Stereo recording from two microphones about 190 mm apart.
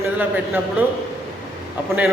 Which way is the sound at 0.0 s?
10° right (ahead or behind).